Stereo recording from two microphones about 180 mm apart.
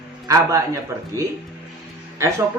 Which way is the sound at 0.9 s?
15° right (ahead or behind).